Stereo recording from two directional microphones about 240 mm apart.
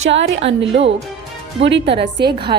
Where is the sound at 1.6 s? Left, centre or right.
Right.